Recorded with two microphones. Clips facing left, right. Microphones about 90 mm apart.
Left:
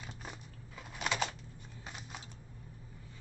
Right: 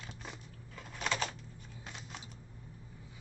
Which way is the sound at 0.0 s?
10° left (ahead or behind).